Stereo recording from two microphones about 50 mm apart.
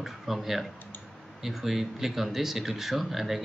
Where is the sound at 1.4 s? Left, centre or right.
Centre.